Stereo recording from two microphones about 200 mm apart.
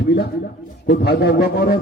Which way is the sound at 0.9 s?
55° left (ahead or behind).